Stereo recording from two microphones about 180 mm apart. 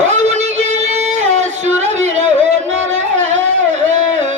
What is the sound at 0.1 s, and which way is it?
Music, 40° right (ahead or behind).